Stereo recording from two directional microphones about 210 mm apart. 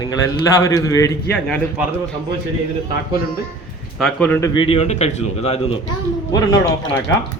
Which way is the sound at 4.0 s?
5° left (ahead or behind).